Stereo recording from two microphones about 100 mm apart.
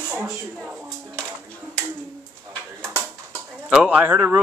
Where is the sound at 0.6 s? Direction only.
15° right (ahead or behind).